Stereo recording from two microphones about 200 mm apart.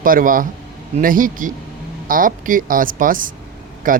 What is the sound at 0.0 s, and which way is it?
Speech, 45° right (ahead or behind).